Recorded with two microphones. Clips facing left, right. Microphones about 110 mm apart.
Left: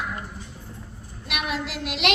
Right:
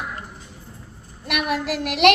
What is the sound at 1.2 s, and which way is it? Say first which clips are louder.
Speech: right 5 dB; 55° right (ahead or behind).